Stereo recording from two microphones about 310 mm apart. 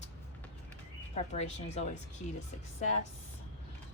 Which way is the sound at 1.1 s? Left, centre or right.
Left.